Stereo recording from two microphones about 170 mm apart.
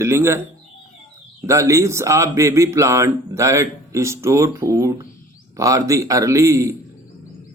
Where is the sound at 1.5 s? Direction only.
20° right (ahead or behind).